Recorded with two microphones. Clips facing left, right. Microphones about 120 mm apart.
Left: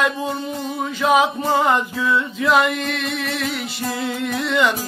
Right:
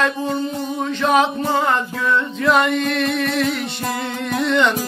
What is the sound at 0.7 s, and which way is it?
Male singing, 5° left (ahead or behind).